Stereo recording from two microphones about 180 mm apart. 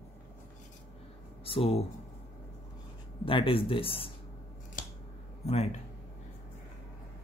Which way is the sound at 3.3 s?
30° left (ahead or behind).